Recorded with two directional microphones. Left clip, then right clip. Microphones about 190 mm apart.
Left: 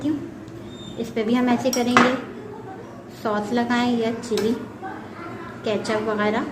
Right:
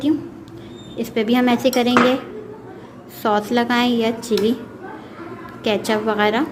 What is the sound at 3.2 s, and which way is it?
A woman's voice, 50° right (ahead or behind).